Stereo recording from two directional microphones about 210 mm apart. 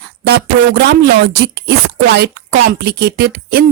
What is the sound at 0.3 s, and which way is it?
Speech, 50° right (ahead or behind).